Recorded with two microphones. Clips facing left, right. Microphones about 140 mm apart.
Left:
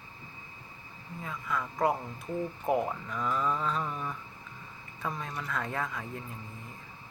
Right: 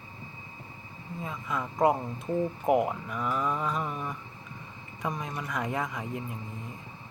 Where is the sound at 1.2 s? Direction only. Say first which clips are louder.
Right 1 dB; 20° right (ahead or behind).